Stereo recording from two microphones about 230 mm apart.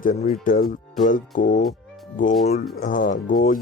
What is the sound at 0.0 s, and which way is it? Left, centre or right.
Speech, left.